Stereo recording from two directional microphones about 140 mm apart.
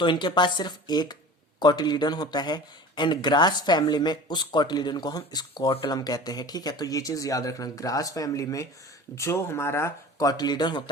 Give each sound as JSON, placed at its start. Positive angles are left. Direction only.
{"t": 0.0, "sound": "speech", "side_deg": 35}